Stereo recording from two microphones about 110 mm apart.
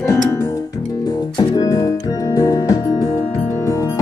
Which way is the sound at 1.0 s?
35° left (ahead or behind).